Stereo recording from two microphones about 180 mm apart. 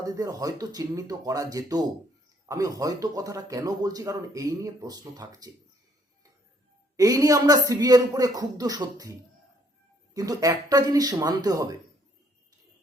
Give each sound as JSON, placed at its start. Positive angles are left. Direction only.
{"t": 0.0, "sound": "a man's voice", "side_deg": -20}
{"t": 6.9, "sound": "a man's voice", "side_deg": -20}
{"t": 10.2, "sound": "a man's voice", "side_deg": -20}